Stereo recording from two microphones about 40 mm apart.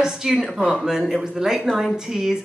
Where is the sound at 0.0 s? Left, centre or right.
Centre.